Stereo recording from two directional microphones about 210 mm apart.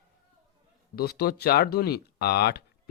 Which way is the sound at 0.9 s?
50° left (ahead or behind).